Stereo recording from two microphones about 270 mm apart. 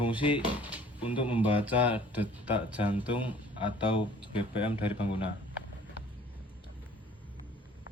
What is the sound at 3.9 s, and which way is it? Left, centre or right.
Speech, centre.